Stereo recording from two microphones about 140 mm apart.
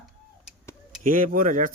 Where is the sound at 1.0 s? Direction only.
75° right (ahead or behind).